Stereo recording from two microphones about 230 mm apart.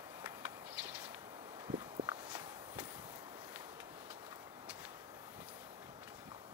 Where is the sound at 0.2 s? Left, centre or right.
Centre.